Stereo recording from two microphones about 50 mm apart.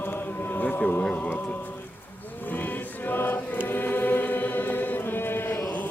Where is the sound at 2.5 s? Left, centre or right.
Left.